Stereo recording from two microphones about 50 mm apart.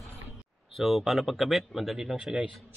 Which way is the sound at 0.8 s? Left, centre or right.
Centre.